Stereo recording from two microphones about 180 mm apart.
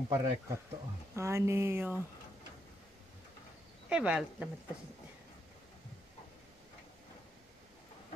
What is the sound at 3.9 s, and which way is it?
Speech, 5° right (ahead or behind).